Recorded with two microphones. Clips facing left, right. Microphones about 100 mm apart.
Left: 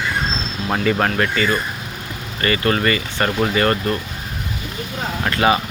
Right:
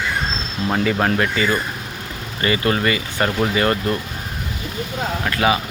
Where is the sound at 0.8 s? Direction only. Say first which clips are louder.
Left 2 dB; 10° right (ahead or behind).